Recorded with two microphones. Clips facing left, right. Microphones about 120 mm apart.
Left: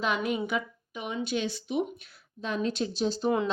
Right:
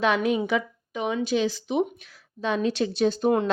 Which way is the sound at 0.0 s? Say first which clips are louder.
Right 6 dB; 90° right.